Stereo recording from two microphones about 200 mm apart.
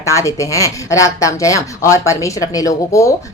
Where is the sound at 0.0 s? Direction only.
15° left (ahead or behind).